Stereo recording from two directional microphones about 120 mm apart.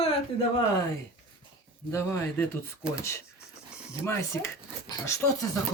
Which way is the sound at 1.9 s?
25° left (ahead or behind).